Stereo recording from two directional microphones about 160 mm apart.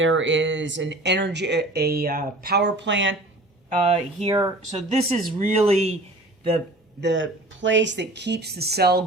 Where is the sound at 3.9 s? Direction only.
40° right (ahead or behind).